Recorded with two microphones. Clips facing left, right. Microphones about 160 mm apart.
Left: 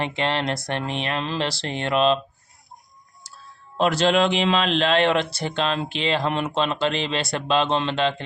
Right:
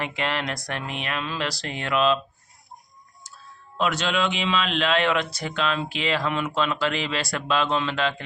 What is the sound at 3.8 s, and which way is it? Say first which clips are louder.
A man's voice: left 5 dB; 35° left (ahead or behind).